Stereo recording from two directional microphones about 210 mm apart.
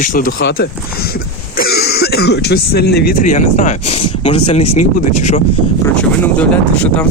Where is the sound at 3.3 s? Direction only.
35° left (ahead or behind).